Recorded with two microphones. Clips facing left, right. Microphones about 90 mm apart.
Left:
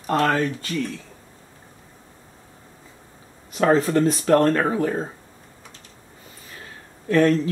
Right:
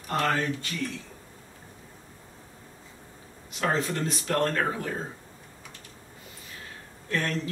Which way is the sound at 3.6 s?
45° left (ahead or behind).